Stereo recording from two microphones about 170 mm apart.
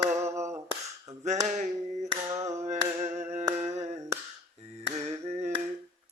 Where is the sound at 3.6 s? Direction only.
45° right (ahead or behind).